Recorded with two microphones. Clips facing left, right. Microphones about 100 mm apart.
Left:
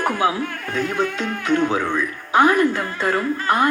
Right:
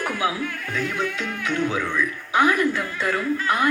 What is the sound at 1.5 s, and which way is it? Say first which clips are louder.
Speech: left 5 dB; 50° left (ahead or behind).